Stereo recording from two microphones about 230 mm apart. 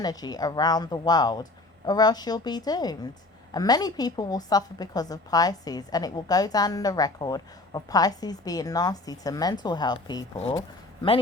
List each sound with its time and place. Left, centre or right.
0.0 s a woman's voice: centre